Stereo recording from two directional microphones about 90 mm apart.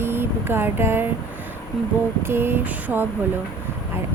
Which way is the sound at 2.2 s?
25° right (ahead or behind).